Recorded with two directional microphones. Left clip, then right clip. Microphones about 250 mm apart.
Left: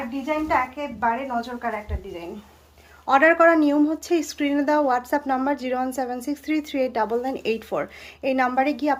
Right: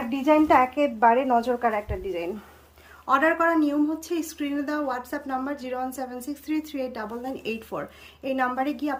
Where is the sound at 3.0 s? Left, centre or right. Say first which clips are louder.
Left 5 dB; centre.